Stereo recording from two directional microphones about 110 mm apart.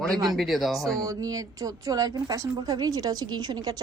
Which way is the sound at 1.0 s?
30° right (ahead or behind).